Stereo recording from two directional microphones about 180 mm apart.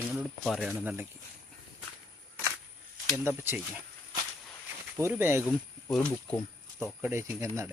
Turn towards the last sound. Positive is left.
turn(degrees=-15)  # may be behind; listen again after turning